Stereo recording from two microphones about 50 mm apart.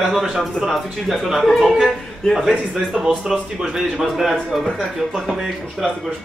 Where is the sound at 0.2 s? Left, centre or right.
Centre.